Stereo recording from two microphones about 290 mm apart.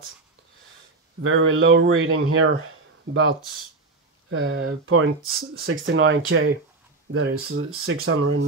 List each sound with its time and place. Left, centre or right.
1.2 s speech: right